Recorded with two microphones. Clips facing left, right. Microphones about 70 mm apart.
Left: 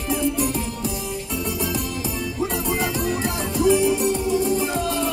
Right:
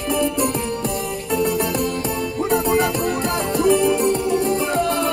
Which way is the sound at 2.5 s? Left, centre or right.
Right.